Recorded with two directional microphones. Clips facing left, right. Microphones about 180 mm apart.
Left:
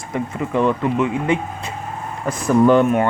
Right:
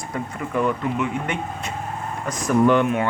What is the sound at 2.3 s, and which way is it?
Speech, 35° left (ahead or behind).